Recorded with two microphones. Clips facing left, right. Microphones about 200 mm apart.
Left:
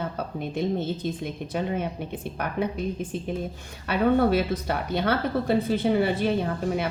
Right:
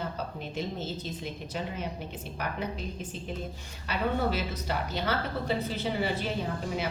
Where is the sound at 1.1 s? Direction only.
55° left (ahead or behind).